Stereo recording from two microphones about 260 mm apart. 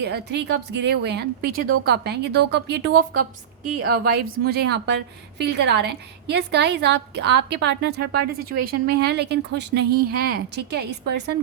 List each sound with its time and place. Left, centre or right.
0.0 s a woman's voice: right